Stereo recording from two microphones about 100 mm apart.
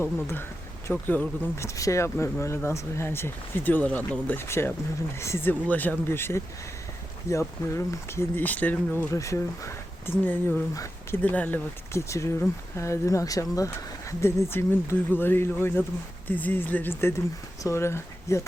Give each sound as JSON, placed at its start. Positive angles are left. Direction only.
{"t": 0.0, "sound": "speech", "side_deg": 25}
{"t": 1.5, "sound": "speech", "side_deg": 30}
{"t": 9.1, "sound": "speech", "side_deg": 30}
{"t": 10.2, "sound": "speech", "side_deg": 20}
{"t": 11.9, "sound": "speech", "side_deg": 30}